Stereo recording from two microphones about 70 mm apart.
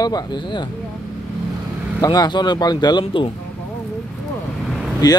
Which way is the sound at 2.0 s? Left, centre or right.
Left.